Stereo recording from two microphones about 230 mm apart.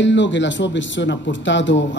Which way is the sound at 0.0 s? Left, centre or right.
Left.